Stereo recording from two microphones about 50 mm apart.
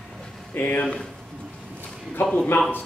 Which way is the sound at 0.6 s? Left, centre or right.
Left.